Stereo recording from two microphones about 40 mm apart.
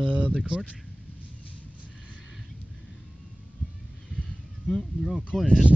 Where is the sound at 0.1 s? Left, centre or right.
Right.